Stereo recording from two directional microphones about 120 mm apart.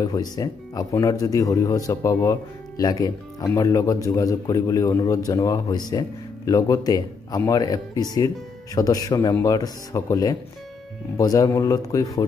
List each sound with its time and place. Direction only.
0.0 s speech: 35° left (ahead or behind)